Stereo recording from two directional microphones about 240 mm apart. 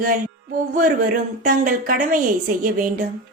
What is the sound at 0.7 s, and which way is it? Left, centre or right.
Speech, right.